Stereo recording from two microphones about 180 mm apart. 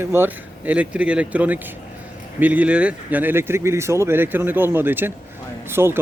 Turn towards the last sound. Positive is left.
turn(degrees=-15)  # may be behind; listen again after turning